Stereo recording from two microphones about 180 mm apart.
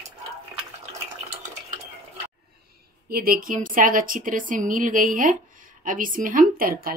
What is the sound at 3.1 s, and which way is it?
A woman's voice, 55° right (ahead or behind).